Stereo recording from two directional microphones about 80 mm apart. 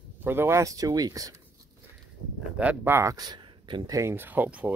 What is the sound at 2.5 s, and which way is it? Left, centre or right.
Speech, centre.